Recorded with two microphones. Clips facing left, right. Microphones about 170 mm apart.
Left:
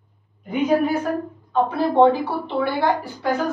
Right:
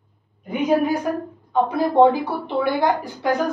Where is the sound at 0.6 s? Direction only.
15° right (ahead or behind).